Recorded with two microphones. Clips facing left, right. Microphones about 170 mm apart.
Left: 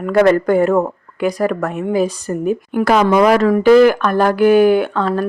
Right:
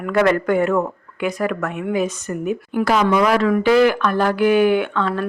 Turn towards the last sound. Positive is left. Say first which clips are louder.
# left 4 dB
turn(degrees=40)  # may be behind; listen again after turning